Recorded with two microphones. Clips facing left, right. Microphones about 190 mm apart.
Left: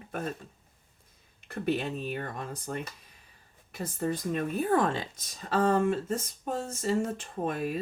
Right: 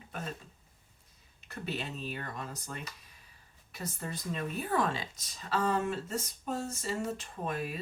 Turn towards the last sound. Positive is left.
turn(degrees=50)  # may be behind; listen again after turning